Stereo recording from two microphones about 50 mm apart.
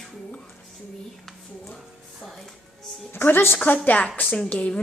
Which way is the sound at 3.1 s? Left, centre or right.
Left.